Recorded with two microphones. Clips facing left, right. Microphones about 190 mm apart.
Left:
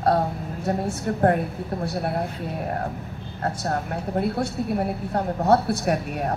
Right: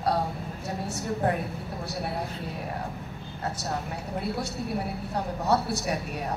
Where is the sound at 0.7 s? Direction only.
55° left (ahead or behind).